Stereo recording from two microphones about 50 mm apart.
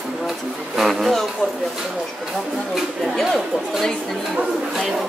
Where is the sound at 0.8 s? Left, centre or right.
Centre.